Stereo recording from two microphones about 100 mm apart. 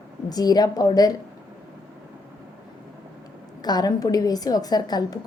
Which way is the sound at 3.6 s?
45° left (ahead or behind).